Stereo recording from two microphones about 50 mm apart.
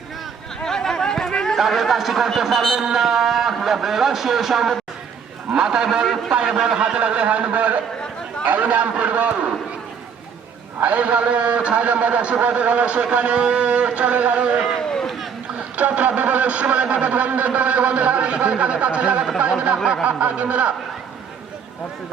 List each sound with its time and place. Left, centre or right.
0.6 s a sound: centre
1.5 s a man's voice: centre
7.0 s a man's voice: right
10.8 s a man's voice: right
14.8 s run: centre
15.8 s a man's voice: right